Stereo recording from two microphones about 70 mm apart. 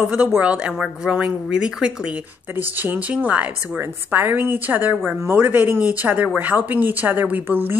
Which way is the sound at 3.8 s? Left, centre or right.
Right.